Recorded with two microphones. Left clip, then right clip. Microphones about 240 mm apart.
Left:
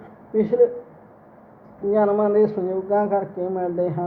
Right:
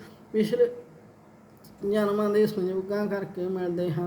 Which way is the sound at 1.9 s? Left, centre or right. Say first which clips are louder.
Left 6 dB; right.